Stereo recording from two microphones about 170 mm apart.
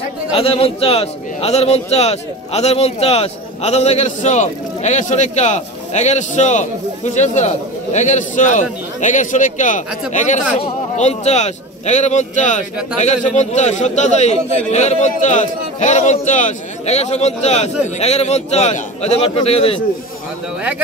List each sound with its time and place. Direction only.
0.3 s a man's voice: 35° left (ahead or behind)